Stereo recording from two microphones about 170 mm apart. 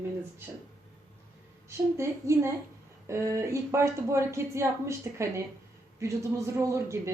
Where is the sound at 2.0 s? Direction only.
15° right (ahead or behind).